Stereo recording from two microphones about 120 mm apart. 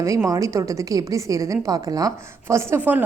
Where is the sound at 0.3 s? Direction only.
25° right (ahead or behind).